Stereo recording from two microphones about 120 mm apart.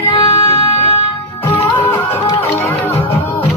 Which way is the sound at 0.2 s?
50° left (ahead or behind).